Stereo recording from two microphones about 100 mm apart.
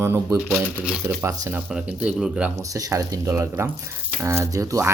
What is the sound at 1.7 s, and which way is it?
Speech, 10° right (ahead or behind).